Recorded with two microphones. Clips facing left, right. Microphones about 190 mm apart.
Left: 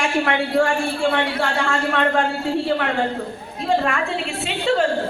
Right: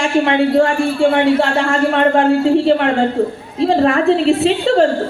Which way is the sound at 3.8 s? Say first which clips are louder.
Right 11 dB; 35° right (ahead or behind).